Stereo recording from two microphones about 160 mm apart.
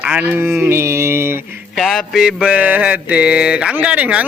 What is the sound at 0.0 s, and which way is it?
Mantra, 10° right (ahead or behind).